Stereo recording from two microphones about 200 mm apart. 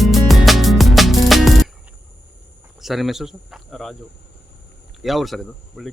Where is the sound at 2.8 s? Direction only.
Centre (ahead or behind).